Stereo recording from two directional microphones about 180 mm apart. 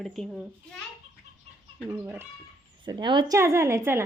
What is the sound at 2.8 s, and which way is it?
Speech, 25° right (ahead or behind).